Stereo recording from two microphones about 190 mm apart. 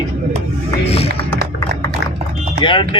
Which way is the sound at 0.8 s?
30° left (ahead or behind).